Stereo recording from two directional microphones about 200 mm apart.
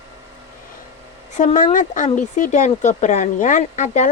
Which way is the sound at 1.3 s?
40° left (ahead or behind).